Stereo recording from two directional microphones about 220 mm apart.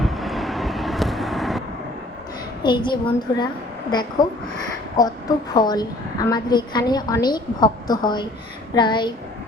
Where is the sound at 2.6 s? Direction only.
20° left (ahead or behind).